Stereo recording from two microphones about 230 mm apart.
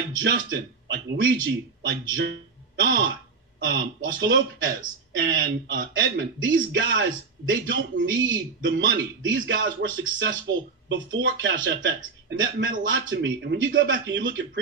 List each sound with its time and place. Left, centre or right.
0.2 s a man's voice: right